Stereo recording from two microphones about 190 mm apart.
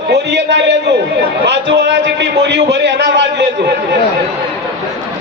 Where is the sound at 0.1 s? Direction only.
65° right (ahead or behind).